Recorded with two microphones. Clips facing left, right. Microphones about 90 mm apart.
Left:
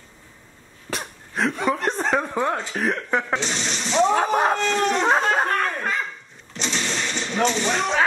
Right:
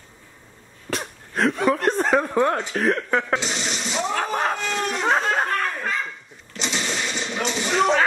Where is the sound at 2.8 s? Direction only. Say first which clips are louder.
Right 2 dB; centre (ahead or behind).